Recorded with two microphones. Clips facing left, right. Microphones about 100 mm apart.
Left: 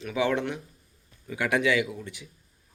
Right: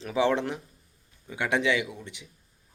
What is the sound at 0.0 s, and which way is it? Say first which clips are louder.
Speech: right 1 dB; 30° right (ahead or behind).